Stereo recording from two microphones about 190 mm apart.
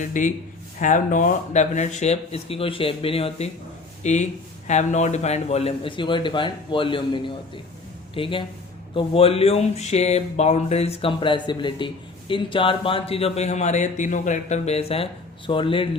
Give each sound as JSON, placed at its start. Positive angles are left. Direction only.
{"t": 0.0, "sound": "speech", "side_deg": 40}